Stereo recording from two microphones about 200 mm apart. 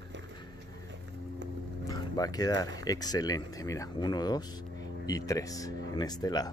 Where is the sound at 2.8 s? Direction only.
20° left (ahead or behind).